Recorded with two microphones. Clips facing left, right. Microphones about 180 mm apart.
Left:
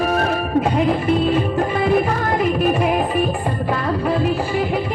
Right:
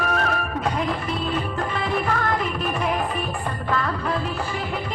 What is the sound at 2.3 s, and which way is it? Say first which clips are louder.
Music: left 7 dB; 25° left (ahead or behind).